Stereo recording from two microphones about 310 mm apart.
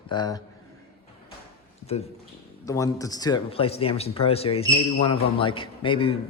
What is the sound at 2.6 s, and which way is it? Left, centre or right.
A man's voice, centre.